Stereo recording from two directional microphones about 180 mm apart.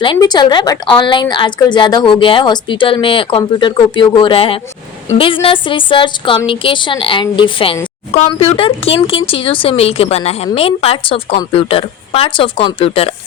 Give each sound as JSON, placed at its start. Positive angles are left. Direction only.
{"t": 0.0, "sound": "a woman's voice", "side_deg": 25}